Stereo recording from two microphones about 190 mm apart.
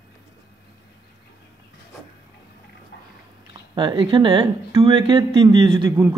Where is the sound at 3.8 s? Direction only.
25° right (ahead or behind).